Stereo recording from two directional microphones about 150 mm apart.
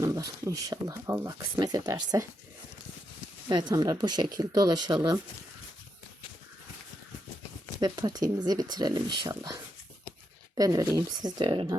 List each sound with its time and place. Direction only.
0.0 s speech: 20° right (ahead or behind)
3.5 s speech: 30° right (ahead or behind)
7.8 s speech: 25° right (ahead or behind)
10.6 s speech: 25° right (ahead or behind)